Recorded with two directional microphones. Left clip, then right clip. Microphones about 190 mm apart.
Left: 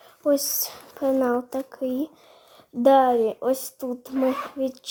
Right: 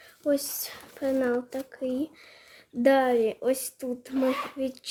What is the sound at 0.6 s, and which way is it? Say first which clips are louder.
A woman's voice: left 5 dB; 10° left (ahead or behind).